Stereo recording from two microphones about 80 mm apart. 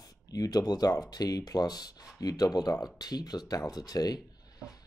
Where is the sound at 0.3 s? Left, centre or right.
Left.